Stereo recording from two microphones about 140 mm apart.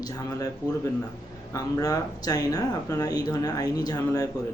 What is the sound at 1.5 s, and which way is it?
Speech, 25° left (ahead or behind).